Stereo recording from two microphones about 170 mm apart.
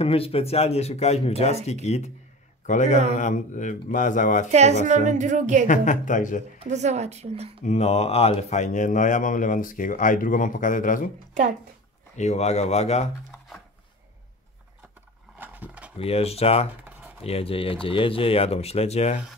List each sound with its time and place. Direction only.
0.0 s speech: 35° left (ahead or behind)
4.5 s a woman's voice: 40° right (ahead or behind)
5.7 s speech: 45° left (ahead or behind)
6.6 s a woman's voice: 40° right (ahead or behind)
7.6 s speech: 40° left (ahead or behind)
12.2 s speech: 40° left (ahead or behind)
15.3 s a sound: 10° right (ahead or behind)
16.0 s speech: 35° left (ahead or behind)